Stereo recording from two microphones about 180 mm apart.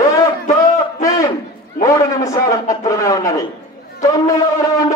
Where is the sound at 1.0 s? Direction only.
20° left (ahead or behind).